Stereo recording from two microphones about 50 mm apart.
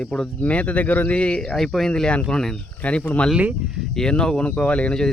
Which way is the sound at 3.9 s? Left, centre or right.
Centre.